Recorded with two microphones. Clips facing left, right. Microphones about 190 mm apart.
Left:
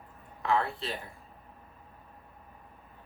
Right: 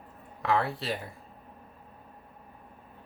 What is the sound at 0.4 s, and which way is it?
Speech, 75° right (ahead or behind).